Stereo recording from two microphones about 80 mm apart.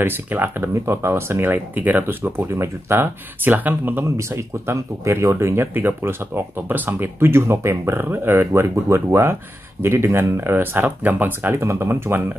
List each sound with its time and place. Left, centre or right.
0.0 s speech: right
4.2 s speech: right
11.6 s speech: right